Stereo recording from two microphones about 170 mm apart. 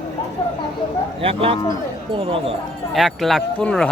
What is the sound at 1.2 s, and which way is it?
Speech, 35° right (ahead or behind).